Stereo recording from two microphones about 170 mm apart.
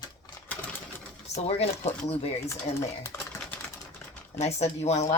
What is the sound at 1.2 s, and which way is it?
Speech, 40° left (ahead or behind).